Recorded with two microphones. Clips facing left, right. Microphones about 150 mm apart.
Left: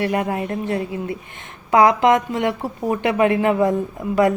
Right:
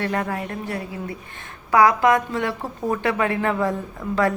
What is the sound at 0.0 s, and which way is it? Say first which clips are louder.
A woman's voice: left 4 dB; 15° left (ahead or behind).